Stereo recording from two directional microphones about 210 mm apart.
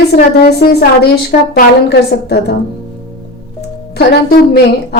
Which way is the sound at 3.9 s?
45° left (ahead or behind).